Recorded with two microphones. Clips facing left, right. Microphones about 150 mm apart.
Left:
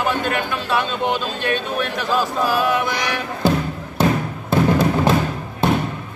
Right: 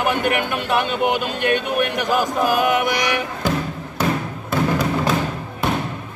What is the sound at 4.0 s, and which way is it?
Music, 30° left (ahead or behind).